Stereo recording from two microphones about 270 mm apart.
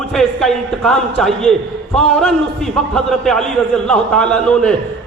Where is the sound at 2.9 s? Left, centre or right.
Centre.